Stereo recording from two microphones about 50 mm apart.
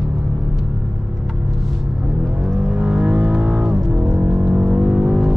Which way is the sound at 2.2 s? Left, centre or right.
Centre.